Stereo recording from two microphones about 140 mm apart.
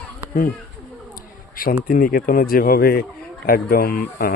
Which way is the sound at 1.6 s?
90° left.